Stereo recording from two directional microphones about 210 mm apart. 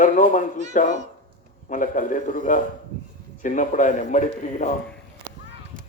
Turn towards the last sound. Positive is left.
turn(degrees=-40)  # may be behind; listen again after turning